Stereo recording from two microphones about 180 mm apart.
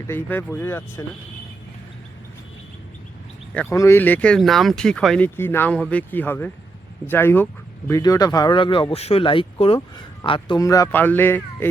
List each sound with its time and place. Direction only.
0.1 s speech: 10° left (ahead or behind)
3.5 s speech: 5° left (ahead or behind)